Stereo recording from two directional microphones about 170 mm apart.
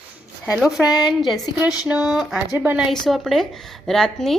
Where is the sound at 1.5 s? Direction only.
25° left (ahead or behind).